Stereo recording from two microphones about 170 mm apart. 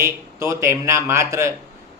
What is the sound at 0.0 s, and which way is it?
A man's voice, 15° right (ahead or behind).